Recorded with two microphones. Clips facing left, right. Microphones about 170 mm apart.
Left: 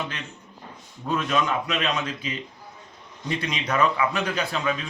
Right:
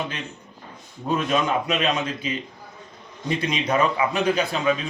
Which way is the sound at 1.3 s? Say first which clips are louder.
Right 2 dB; 25° right (ahead or behind).